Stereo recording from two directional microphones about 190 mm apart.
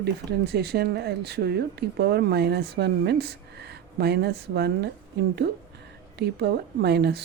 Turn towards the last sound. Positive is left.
turn(degrees=-60)  # may be behind; listen again after turning